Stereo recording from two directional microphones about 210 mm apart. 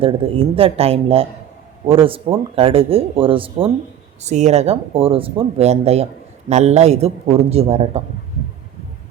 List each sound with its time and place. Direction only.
0.0 s a man's voice: 25° right (ahead or behind)